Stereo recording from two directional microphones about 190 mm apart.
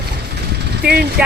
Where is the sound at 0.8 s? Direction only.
60° right (ahead or behind).